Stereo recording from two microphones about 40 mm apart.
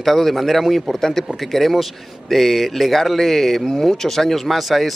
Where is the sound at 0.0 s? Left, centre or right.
Centre.